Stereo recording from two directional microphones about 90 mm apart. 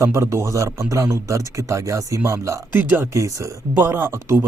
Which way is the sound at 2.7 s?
20° right (ahead or behind).